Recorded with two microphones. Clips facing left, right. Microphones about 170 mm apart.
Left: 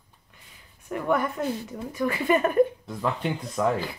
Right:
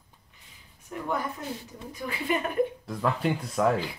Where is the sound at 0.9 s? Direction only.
65° left (ahead or behind).